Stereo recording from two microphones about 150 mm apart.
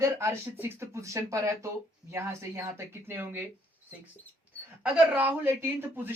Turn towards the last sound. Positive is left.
turn(degrees=-15)  # may be behind; listen again after turning